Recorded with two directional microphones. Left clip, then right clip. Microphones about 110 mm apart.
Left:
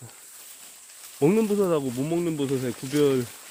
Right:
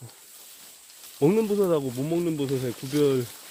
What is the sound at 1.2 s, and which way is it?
Speech, 10° left (ahead or behind).